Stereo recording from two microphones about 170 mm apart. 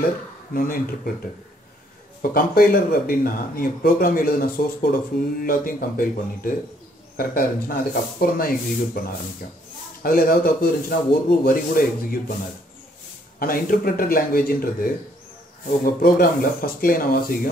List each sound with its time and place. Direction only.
0.5 s speech: 55° left (ahead or behind)
2.3 s speech: 55° left (ahead or behind)
10.0 s speech: 55° left (ahead or behind)
13.4 s speech: 60° left (ahead or behind)